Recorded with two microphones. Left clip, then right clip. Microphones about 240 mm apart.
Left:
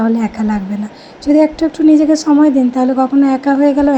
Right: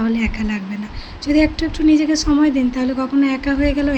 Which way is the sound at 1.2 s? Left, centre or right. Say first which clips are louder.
Left 6 dB; left.